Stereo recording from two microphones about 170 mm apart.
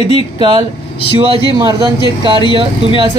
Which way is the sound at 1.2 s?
30° right (ahead or behind).